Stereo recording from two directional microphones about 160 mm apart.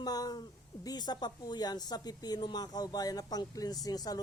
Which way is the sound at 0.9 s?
25° left (ahead or behind).